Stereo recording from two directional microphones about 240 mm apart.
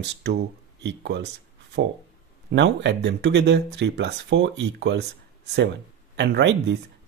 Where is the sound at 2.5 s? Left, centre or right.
Right.